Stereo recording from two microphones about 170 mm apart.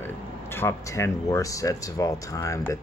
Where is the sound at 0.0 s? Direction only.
15° left (ahead or behind).